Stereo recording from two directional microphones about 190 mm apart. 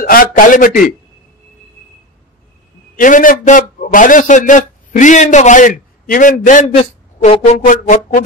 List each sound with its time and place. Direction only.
0.0 s a man's voice: 50° left (ahead or behind)
3.0 s a man's voice: 45° left (ahead or behind)